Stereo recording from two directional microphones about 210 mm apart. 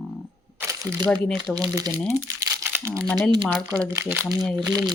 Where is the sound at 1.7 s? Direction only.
15° right (ahead or behind).